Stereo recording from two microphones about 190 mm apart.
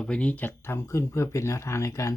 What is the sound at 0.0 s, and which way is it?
Speech, 5° left (ahead or behind).